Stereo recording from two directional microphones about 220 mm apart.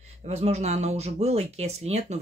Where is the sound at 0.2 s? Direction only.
30° right (ahead or behind).